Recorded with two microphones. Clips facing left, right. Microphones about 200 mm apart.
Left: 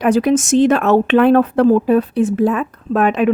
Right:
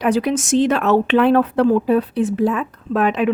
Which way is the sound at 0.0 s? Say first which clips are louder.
Left 4 dB; 50° left (ahead or behind).